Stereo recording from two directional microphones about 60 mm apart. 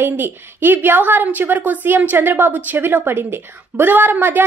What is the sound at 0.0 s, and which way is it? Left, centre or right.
A woman's voice, right.